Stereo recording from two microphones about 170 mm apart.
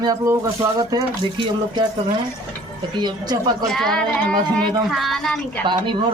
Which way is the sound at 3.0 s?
25° right (ahead or behind).